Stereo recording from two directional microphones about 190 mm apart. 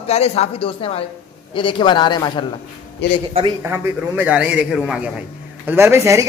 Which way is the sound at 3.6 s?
10° right (ahead or behind).